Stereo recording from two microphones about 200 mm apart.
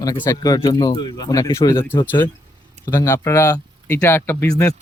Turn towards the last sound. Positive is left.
turn(degrees=10)  # may be behind; listen again after turning